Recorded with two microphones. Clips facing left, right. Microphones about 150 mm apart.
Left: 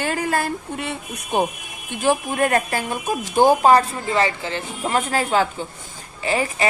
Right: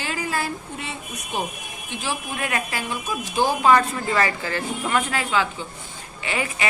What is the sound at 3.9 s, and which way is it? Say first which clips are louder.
A woman's voice: left 2 dB; 25° left (ahead or behind).